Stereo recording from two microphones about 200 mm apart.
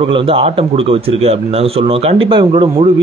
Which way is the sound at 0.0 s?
25° right (ahead or behind).